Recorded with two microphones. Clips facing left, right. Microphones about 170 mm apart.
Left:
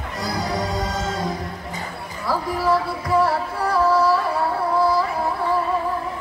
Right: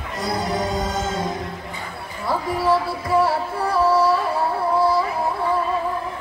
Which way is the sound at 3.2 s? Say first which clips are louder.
Even; 25° right (ahead or behind).